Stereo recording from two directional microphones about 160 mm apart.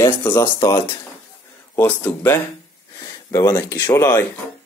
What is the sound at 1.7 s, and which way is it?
Speech, 10° left (ahead or behind).